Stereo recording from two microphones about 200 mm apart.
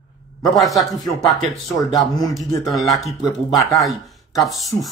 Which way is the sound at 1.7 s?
20° left (ahead or behind).